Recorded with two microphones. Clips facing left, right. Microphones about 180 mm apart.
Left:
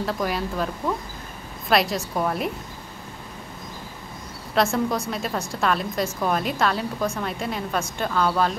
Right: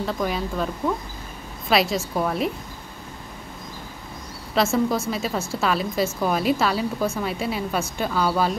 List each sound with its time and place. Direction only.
0.0 s a woman's voice: centre (ahead or behind)
4.6 s a woman's voice: centre (ahead or behind)